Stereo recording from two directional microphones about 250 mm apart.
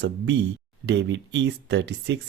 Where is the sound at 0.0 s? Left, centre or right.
Right.